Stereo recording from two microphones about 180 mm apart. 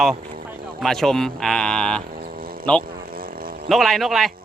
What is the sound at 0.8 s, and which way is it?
A man's voice, centre (ahead or behind).